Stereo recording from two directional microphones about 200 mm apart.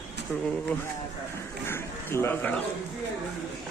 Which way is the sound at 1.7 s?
10° left (ahead or behind).